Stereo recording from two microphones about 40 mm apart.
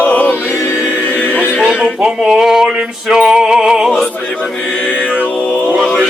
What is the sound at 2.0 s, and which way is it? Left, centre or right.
Speech, centre.